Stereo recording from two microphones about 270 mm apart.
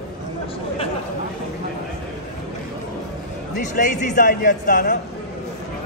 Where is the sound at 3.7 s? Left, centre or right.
Left.